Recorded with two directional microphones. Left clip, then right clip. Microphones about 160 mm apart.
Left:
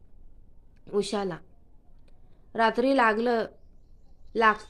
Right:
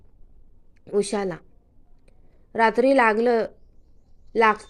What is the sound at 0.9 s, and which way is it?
A woman's voice, 15° right (ahead or behind).